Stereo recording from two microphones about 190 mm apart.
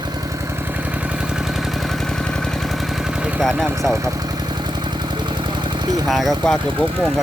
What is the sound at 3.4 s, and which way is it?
Speech, centre (ahead or behind).